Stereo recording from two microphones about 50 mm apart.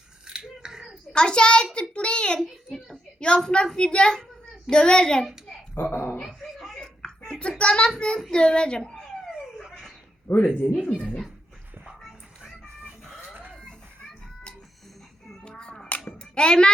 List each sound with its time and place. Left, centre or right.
0.3 s scissors: centre
1.1 s a child's voice: centre
2.7 s a sound: centre
3.8 s a child's voice: centre
5.7 s dog: left
6.1 s a sound: centre
6.7 s a sound: centre
8.3 s a child's voice: centre
9.6 s dog: centre
10.2 s speech: left
10.6 s speech: left
15.4 s music: centre
16.3 s a child's voice: centre